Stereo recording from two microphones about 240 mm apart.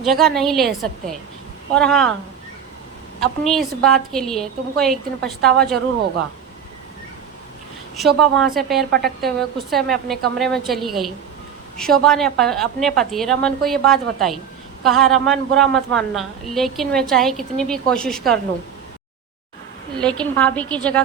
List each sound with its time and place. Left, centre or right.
0.0 s a woman's voice: centre
3.2 s a woman's voice: centre
7.9 s a woman's voice: centre
8.9 s a woman's voice: right
9.2 s a woman's voice: centre
20.0 s a woman's voice: centre